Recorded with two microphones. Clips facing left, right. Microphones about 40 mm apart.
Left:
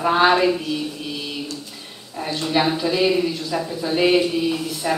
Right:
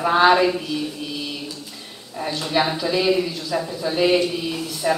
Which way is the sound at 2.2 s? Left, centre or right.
Centre.